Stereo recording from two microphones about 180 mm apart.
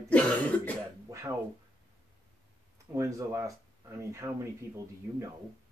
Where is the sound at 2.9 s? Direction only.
15° right (ahead or behind).